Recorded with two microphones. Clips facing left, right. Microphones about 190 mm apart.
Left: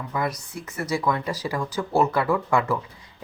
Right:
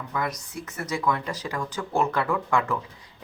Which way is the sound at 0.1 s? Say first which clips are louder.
Left 2 dB; 10° left (ahead or behind).